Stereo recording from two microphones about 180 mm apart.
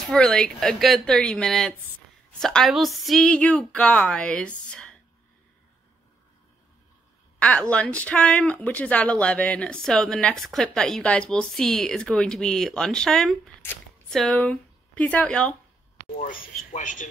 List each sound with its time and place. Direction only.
0.0 s speech: 5° left (ahead or behind)
7.3 s a woman's voice: 5° left (ahead or behind)
16.7 s speech: 45° left (ahead or behind)